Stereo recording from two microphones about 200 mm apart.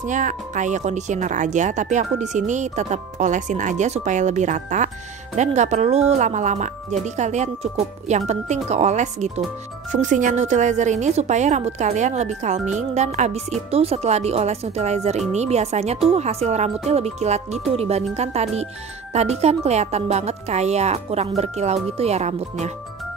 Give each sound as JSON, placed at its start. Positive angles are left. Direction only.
{"t": 0.0, "sound": "speech", "side_deg": -40}